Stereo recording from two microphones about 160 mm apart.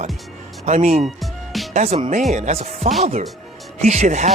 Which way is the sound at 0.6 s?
45° right (ahead or behind).